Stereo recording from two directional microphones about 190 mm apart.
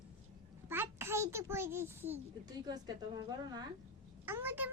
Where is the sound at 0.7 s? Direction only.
10° right (ahead or behind).